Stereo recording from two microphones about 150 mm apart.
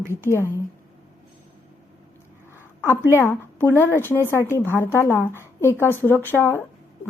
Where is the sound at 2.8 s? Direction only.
15° left (ahead or behind).